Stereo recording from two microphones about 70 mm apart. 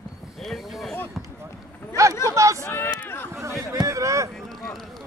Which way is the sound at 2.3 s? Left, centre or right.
Right.